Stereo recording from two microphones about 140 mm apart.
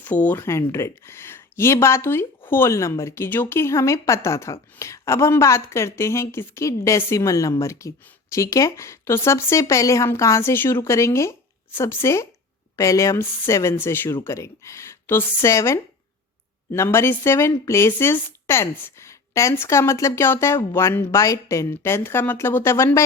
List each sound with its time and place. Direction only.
0.0 s a woman's voice: 10° left (ahead or behind)